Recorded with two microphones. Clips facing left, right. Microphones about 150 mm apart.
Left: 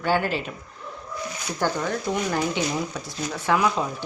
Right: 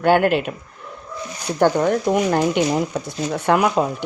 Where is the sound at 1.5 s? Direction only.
55° right (ahead or behind).